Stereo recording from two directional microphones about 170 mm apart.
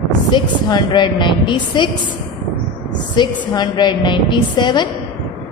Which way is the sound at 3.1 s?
25° left (ahead or behind).